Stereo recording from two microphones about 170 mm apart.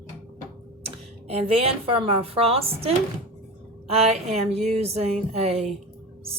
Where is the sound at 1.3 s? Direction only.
35° right (ahead or behind).